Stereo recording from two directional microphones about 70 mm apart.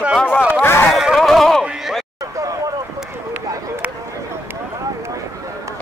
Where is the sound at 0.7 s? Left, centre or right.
Left.